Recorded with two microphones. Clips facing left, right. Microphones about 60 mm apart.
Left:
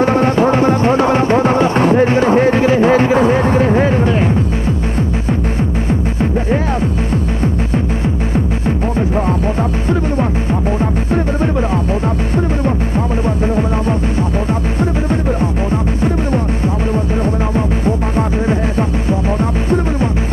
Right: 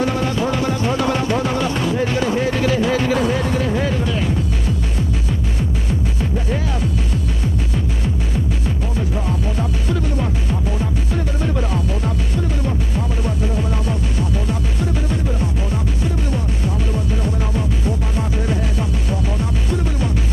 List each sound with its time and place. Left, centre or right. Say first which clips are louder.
0.0 s music: left 8 dB; left
9.1 s music: left 7 dB; left
12.4 s music: left 8 dB; left